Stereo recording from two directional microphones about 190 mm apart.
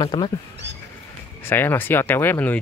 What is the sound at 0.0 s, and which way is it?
Speech, 25° left (ahead or behind).